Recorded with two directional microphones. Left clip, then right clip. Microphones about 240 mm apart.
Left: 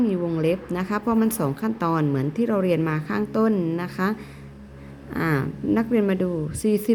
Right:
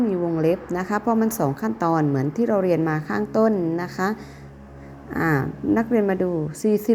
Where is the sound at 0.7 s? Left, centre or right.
Centre.